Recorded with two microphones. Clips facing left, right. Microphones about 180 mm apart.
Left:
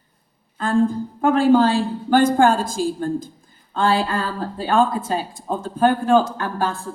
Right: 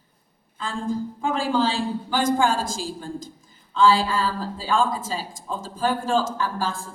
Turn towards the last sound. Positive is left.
turn(degrees=60)  # may be behind; listen again after turning